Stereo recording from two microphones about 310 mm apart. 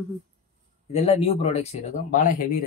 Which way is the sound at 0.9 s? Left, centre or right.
Left.